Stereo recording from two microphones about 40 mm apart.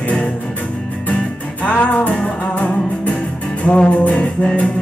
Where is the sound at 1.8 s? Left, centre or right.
Left.